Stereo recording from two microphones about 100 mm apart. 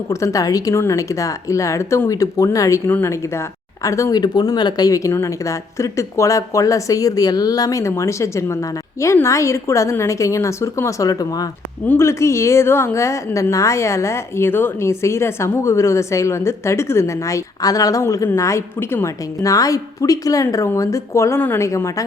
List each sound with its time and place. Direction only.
0.1 s a woman's voice: 30° left (ahead or behind)
4.2 s a woman's voice: 45° left (ahead or behind); by 19.1 s 25° left (ahead or behind)
19.4 s speech: 35° left (ahead or behind)